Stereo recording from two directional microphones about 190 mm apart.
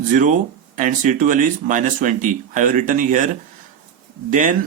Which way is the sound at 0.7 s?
40° right (ahead or behind).